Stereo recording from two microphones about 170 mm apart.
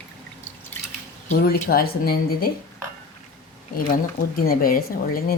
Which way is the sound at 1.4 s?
65° left (ahead or behind).